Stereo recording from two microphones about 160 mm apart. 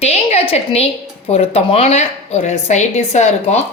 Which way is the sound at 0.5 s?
40° left (ahead or behind).